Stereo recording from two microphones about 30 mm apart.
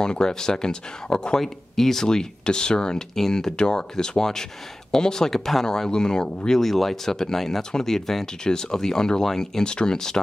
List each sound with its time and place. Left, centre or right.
0.0 s speech: left
1.4 s speech: centre
2.0 s speech: left
6.6 s speech: centre
7.2 s speech: centre
8.5 s speech: left